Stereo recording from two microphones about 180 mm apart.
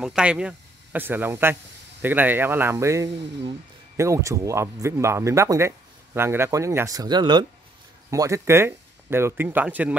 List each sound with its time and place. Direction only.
0.0 s speech: 5° right (ahead or behind)